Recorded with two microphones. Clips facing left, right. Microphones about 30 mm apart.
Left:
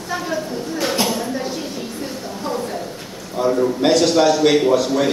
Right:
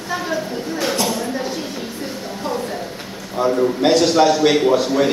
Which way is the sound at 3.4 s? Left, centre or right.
Centre.